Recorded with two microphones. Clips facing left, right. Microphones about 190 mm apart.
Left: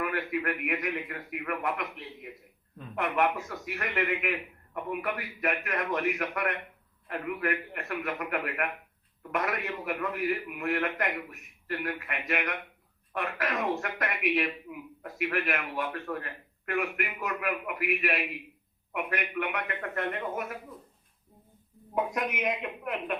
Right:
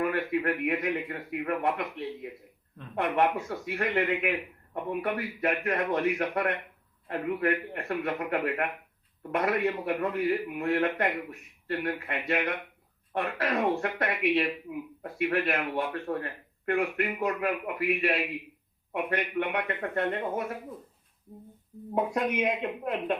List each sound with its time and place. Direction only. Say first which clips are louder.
0.0 s a man's voice: right 3 dB; 30° right (ahead or behind)
21.9 s a man's voice: right 3 dB; 30° right (ahead or behind)